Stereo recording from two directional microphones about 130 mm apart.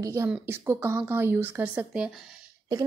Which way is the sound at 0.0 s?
25° right (ahead or behind).